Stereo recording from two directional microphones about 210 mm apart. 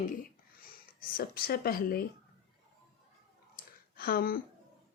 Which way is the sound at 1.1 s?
45° left (ahead or behind).